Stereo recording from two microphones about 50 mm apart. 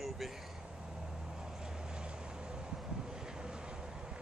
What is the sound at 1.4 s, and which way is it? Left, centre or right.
Vehicle, centre.